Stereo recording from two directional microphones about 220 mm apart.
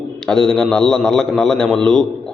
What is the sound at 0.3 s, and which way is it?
A man's voice, 5° left (ahead or behind).